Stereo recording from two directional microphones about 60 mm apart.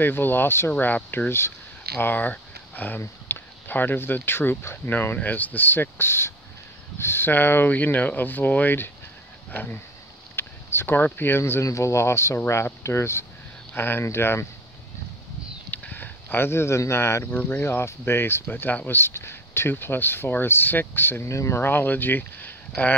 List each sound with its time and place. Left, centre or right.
0.0 s speech: left
10.3 s a sound: left
11.1 s speech: left
11.6 s speech: left
13.7 s speech: left
15.7 s a sound: left
17.2 s speech: left
17.6 s speech: left
21.6 s speech: left